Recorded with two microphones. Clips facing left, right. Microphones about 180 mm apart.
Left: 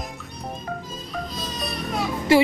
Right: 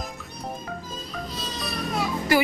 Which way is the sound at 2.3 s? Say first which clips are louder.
Left 5 dB; 25° left (ahead or behind).